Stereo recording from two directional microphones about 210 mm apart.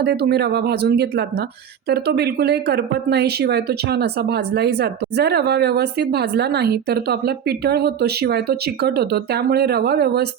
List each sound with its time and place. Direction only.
0.0 s speech: 50° right (ahead or behind)